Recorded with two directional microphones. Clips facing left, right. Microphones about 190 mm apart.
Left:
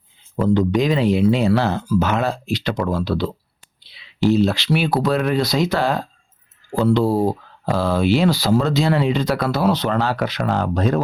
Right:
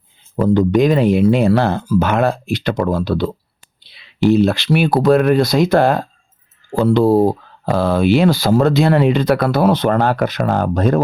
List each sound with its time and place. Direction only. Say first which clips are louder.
0.3 s speech: right 4 dB; 45° right (ahead or behind)